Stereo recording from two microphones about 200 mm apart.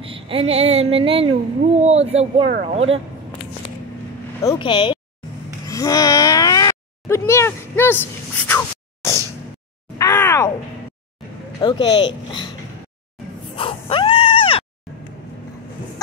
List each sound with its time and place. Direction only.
0.0 s speech: 25° right (ahead or behind)
4.4 s speech: 20° left (ahead or behind)
5.7 s a sound: 15° left (ahead or behind)
9.9 s groan: 15° left (ahead or behind)
11.6 s speech: 20° left (ahead or behind)
13.6 s a sound: 25° left (ahead or behind)